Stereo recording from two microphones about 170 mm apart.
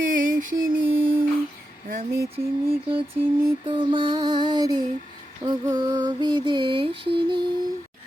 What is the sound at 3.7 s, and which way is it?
Music, 30° right (ahead or behind).